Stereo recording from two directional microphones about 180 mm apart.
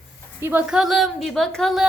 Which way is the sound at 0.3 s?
10° right (ahead or behind).